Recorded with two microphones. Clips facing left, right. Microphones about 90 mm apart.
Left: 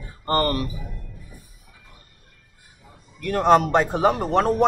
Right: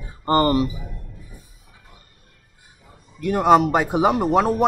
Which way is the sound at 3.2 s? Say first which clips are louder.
Right 2 dB; 15° right (ahead or behind).